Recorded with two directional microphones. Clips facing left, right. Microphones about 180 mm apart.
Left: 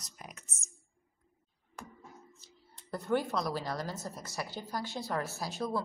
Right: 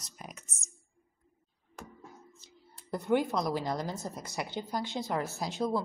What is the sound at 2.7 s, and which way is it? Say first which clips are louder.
Speech: right 3 dB; 15° right (ahead or behind).